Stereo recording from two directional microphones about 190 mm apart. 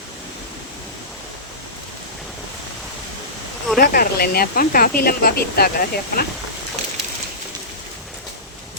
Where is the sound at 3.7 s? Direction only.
50° left (ahead or behind).